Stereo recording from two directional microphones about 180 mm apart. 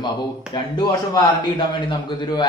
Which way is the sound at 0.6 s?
25° left (ahead or behind).